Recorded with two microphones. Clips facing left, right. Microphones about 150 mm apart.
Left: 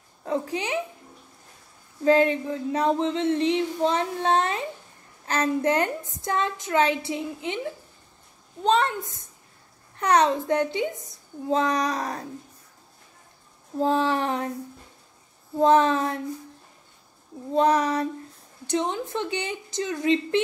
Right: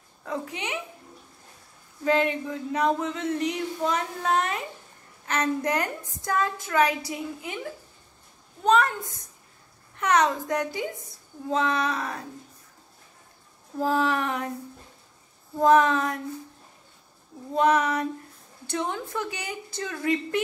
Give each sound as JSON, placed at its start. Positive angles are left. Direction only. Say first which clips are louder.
{"t": 0.2, "sound": "a woman's voice", "louder": "left 5 dB", "side_deg": 30}
{"t": 2.0, "sound": "female singing", "louder": "left 4 dB", "side_deg": 30}
{"t": 11.5, "sound": "a child's voice", "louder": "left 2 dB", "side_deg": 35}
{"t": 13.7, "sound": "female singing", "louder": "left 2 dB", "side_deg": 25}
{"t": 15.6, "sound": "female singing", "louder": "even", "side_deg": 30}
{"t": 17.6, "sound": "a child's voice", "louder": "left 1 dB", "side_deg": 35}
{"t": 18.7, "sound": "female singing", "louder": "left 4 dB", "side_deg": 20}